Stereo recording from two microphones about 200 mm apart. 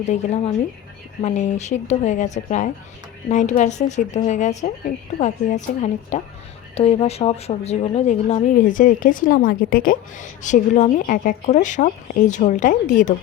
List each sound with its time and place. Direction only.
0.0 s a woman's voice: 35° left (ahead or behind)